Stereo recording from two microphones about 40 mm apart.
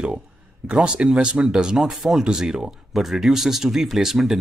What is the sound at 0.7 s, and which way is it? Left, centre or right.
Speech, right.